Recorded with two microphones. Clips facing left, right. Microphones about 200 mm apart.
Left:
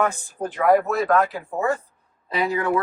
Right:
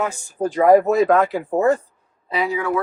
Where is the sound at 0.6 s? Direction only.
45° right (ahead or behind).